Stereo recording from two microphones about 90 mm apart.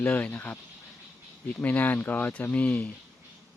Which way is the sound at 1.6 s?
20° left (ahead or behind).